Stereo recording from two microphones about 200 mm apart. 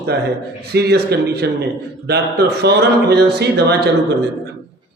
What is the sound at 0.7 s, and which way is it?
A man's voice, 55° right (ahead or behind).